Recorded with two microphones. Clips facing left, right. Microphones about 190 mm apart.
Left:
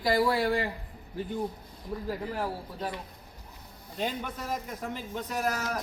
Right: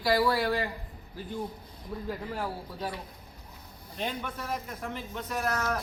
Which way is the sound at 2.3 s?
10° right (ahead or behind).